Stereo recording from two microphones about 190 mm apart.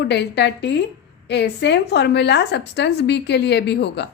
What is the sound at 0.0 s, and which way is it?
A woman's voice, 65° left (ahead or behind).